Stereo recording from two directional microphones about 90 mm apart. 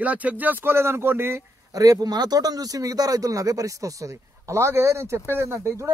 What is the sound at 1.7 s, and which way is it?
A man's voice, 45° right (ahead or behind).